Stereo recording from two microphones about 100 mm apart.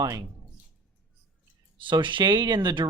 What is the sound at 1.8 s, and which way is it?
Speech, 55° right (ahead or behind).